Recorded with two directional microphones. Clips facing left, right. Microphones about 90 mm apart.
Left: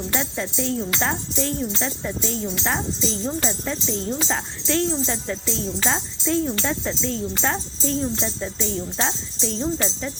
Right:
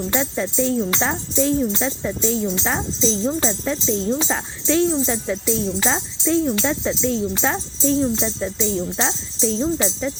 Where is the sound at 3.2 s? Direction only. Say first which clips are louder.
Right 4 dB; 20° right (ahead or behind).